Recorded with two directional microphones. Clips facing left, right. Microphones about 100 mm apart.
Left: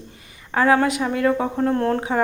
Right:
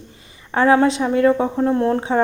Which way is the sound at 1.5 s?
10° right (ahead or behind).